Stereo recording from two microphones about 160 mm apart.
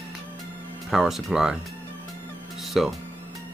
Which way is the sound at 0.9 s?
Centre (ahead or behind).